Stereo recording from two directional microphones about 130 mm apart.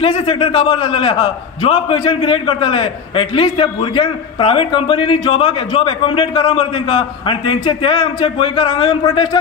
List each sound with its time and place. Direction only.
0.0 s a man's voice: 45° left (ahead or behind)